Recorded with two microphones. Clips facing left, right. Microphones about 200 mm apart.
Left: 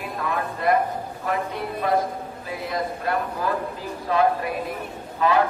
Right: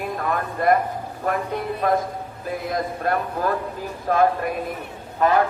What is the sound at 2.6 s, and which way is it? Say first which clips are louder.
Music: right 2 dB; 50° right (ahead or behind).